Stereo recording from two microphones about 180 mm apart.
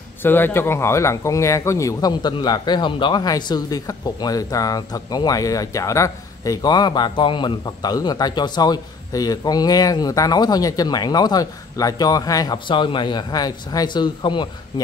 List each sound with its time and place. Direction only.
0.2 s speech: 10° left (ahead or behind)